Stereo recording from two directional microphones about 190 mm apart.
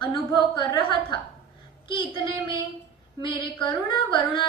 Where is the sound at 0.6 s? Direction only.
25° left (ahead or behind).